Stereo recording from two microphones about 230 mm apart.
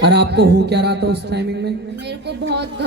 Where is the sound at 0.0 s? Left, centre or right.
Right.